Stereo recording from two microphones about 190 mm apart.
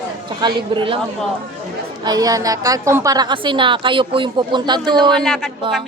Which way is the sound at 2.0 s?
20° right (ahead or behind).